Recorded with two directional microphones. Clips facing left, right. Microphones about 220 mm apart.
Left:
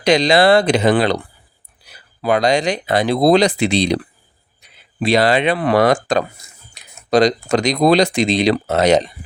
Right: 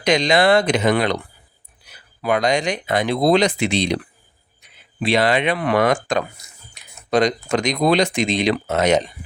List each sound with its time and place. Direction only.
0.0 s speech: 35° left (ahead or behind)
6.8 s a sound: 35° left (ahead or behind)
7.1 s speech: 35° left (ahead or behind)